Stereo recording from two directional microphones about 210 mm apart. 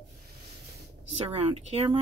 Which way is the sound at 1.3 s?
25° right (ahead or behind).